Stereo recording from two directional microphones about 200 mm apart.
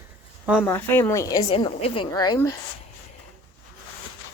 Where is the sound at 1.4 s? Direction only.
30° left (ahead or behind).